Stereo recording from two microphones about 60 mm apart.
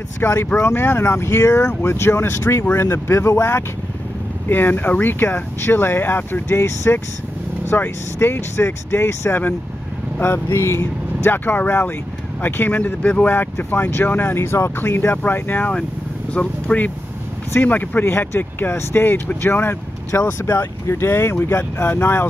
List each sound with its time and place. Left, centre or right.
0.2 s speech: left
4.5 s speech: left
13.0 s speech: centre
13.3 s speech: left
16.3 s speech: left
18.0 s speech: left